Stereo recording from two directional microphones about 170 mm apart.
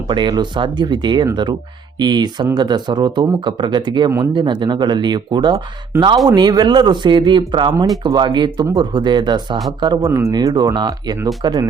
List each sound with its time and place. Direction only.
0.1 s speech: 25° right (ahead or behind)